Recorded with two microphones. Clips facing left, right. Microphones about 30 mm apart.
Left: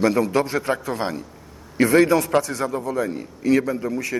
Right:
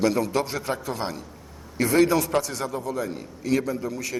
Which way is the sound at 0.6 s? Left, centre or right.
Left.